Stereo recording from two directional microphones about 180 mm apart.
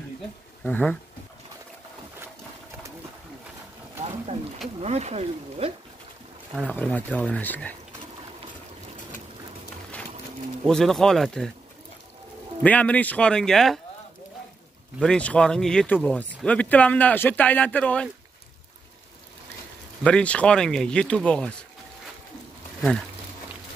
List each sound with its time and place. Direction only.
0.7 s speech: 10° left (ahead or behind)
4.7 s speech: 35° right (ahead or behind)
6.7 s speech: 10° left (ahead or behind)
10.6 s speech: 5° left (ahead or behind)
12.6 s speech: 10° left (ahead or behind)
15.0 s speech: 5° left (ahead or behind)
20.0 s speech: 5° left (ahead or behind)